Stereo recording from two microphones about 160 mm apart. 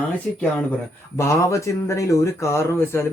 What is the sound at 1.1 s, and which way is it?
Speech, 15° left (ahead or behind).